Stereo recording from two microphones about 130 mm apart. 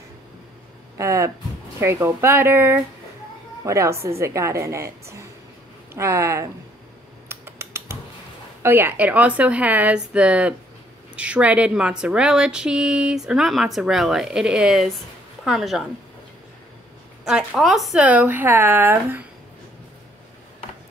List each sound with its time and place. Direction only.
0.9 s a woman's voice: 25° right (ahead or behind)
7.2 s typing: 20° right (ahead or behind)
8.6 s a woman's voice: 15° right (ahead or behind)
17.2 s a woman's voice: 5° right (ahead or behind)